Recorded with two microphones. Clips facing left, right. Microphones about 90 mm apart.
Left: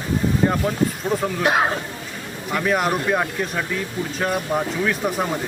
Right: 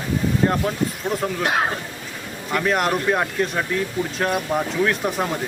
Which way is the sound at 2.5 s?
Centre (ahead or behind).